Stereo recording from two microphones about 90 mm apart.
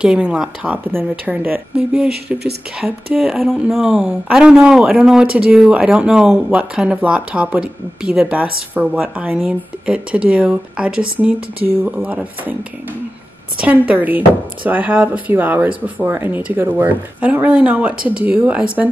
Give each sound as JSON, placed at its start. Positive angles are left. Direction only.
{"t": 0.0, "sound": "speech", "side_deg": -10}
{"t": 2.8, "sound": "a sound", "side_deg": 0}
{"t": 3.7, "sound": "speech", "side_deg": -5}
{"t": 13.6, "sound": "speech", "side_deg": -15}